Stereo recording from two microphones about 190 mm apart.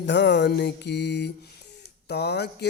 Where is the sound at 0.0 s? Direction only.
65° left (ahead or behind).